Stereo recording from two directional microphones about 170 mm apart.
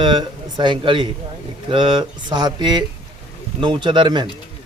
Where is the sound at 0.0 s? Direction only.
25° right (ahead or behind).